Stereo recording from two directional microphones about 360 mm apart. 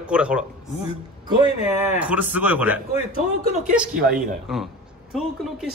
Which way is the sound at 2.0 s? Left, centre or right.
Centre.